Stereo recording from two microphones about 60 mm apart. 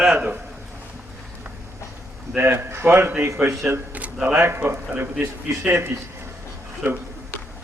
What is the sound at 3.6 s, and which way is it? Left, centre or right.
Speech, centre.